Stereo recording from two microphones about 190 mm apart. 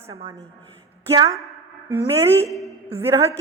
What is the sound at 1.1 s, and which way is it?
A woman's voice, 15° right (ahead or behind).